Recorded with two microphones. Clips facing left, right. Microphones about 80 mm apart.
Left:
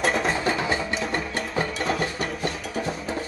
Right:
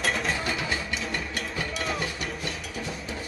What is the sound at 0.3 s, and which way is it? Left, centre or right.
Music, left.